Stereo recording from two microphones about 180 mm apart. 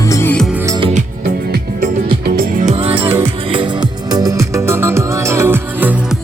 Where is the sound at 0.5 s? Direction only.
15° right (ahead or behind).